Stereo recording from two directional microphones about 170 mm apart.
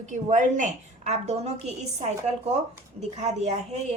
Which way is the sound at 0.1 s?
45° right (ahead or behind).